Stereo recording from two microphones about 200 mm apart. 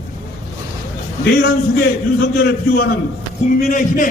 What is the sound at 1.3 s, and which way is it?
A man's voice, 55° left (ahead or behind).